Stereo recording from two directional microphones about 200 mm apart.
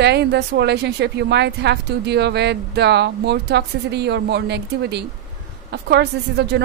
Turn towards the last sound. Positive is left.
turn(degrees=-55)  # may be behind; listen again after turning